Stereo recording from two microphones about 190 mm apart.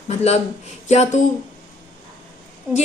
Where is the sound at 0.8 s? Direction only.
35° left (ahead or behind).